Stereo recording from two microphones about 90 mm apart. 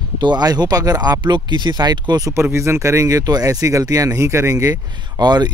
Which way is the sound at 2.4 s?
30° right (ahead or behind).